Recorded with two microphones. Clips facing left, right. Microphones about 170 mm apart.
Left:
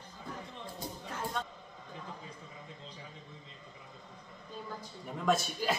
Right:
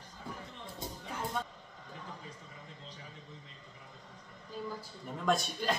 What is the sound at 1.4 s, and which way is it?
Speech, 10° right (ahead or behind).